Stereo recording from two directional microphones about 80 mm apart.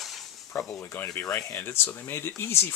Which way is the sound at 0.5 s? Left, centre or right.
Left.